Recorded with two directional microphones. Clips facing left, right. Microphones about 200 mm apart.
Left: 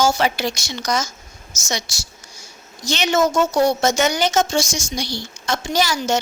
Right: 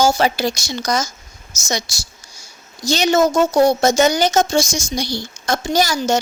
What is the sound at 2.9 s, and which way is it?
Speech, 35° right (ahead or behind).